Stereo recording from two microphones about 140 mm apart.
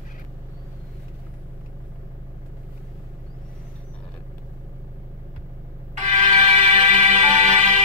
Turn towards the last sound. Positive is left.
turn(degrees=-55)  # may be behind; listen again after turning